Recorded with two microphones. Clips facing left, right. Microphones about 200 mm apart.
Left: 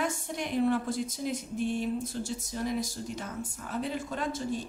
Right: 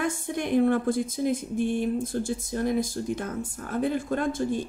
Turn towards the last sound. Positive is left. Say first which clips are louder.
# right 6 dB
turn(degrees=-55)  # may be behind; listen again after turning